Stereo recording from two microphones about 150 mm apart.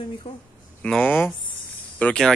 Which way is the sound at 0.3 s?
40° left (ahead or behind).